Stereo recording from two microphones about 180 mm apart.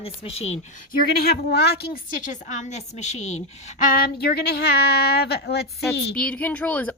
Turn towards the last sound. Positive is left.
turn(degrees=10)  # may be behind; listen again after turning